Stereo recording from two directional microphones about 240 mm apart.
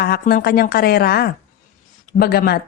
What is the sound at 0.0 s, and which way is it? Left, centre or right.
A woman's voice, left.